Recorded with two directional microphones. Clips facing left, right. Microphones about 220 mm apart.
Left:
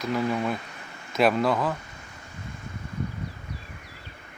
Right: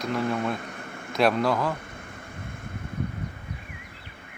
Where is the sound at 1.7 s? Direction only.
55° right (ahead or behind).